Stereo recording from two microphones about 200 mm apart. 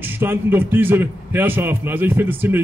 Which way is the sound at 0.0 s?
10° right (ahead or behind).